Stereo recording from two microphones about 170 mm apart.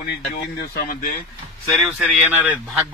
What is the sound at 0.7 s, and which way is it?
Speech, 55° left (ahead or behind).